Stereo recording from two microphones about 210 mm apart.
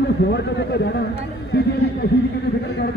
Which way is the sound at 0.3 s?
55° left (ahead or behind).